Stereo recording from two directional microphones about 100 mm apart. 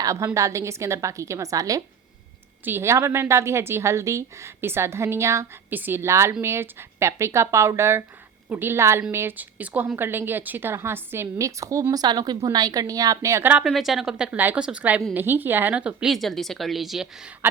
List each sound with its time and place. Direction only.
0.0 s a woman's voice: 35° right (ahead or behind)
2.6 s a woman's voice: 25° right (ahead or behind)
13.4 s a woman's voice: 15° right (ahead or behind)
13.7 s a woman's voice: centre (ahead or behind)
14.3 s a woman's voice: 20° right (ahead or behind)